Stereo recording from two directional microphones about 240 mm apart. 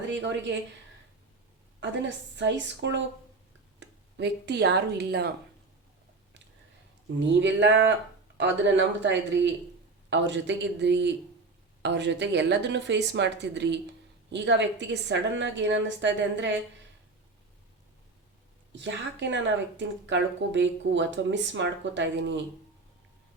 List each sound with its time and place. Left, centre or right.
0.1 s speech: right
1.8 s speech: right
7.2 s speech: right
18.7 s speech: right